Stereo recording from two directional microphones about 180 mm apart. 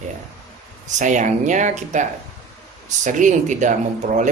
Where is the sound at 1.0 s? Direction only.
45° right (ahead or behind).